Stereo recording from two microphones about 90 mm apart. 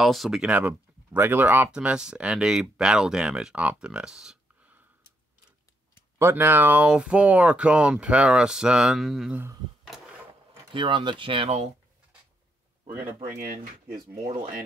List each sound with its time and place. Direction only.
0.0 s speech: centre (ahead or behind)
0.5 s speech: 20° right (ahead or behind)
6.1 s speech: 25° right (ahead or behind); by 9.3 s 5° right (ahead or behind)
9.8 s a sound: 5° right (ahead or behind)
10.7 s speech: 65° right (ahead or behind)